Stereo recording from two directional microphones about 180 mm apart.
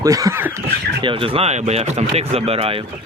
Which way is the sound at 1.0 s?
30° right (ahead or behind).